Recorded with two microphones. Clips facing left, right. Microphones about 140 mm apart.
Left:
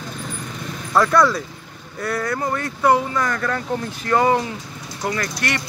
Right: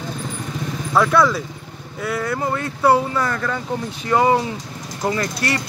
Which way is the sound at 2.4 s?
25° right (ahead or behind).